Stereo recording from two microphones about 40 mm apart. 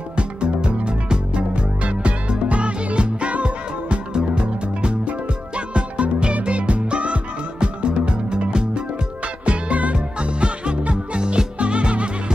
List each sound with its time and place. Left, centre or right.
0.4 s music: right